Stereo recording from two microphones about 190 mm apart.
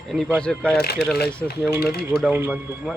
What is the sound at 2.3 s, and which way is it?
Speech, 10° right (ahead or behind).